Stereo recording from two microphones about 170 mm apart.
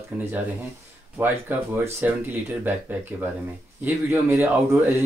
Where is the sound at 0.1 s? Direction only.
10° right (ahead or behind).